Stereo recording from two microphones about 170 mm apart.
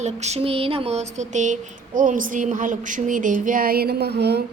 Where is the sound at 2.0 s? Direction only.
50° right (ahead or behind).